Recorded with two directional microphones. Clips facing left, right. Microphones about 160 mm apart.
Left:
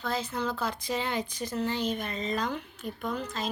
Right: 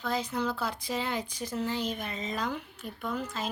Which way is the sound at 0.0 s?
15° right (ahead or behind).